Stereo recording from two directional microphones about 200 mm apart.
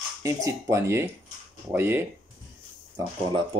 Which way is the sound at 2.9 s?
20° right (ahead or behind).